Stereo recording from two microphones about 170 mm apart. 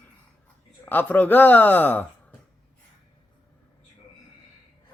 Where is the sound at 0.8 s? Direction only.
10° left (ahead or behind).